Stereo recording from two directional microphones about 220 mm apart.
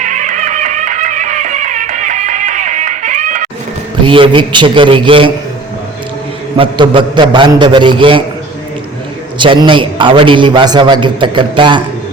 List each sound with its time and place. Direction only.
0.0 s music: 35° right (ahead or behind)
4.0 s a man's voice: 25° right (ahead or behind)
6.6 s a man's voice: 20° right (ahead or behind)
9.4 s a man's voice: 20° right (ahead or behind)